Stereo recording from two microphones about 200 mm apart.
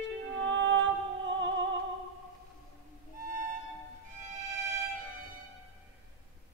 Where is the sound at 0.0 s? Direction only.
65° right (ahead or behind).